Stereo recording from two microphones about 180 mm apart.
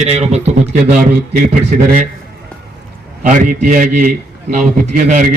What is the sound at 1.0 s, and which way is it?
A man's voice, 50° right (ahead or behind).